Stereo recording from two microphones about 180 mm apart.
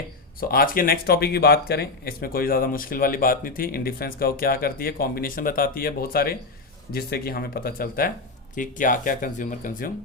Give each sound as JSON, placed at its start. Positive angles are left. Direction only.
{"t": 0.3, "sound": "speech", "side_deg": 55}